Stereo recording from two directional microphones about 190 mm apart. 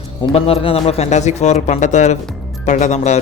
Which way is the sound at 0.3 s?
30° left (ahead or behind).